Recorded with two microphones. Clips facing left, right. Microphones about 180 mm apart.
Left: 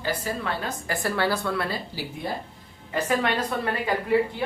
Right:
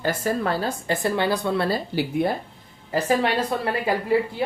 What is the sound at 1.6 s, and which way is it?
Speech, 40° right (ahead or behind).